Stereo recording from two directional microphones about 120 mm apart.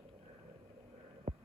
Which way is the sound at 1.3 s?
50° right (ahead or behind).